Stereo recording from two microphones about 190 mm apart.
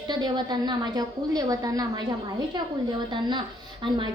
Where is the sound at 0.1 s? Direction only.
25° right (ahead or behind).